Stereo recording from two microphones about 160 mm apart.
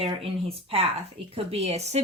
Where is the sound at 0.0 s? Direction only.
35° right (ahead or behind).